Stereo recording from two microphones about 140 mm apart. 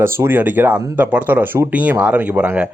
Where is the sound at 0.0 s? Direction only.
15° right (ahead or behind).